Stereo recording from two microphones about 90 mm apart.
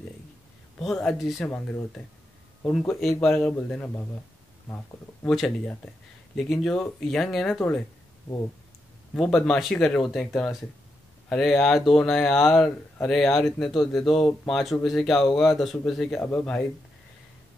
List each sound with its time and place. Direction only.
0.8 s speech: centre (ahead or behind)
2.7 s speech: 5° left (ahead or behind)
6.3 s speech: 5° left (ahead or behind)
9.1 s speech: 5° left (ahead or behind)